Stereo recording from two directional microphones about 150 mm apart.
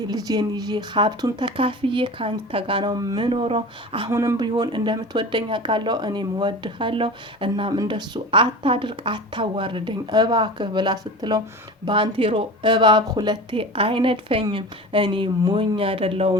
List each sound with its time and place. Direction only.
0.1 s speech: 25° right (ahead or behind)
4.1 s speech: 20° right (ahead or behind); by 16.3 s 40° right (ahead or behind)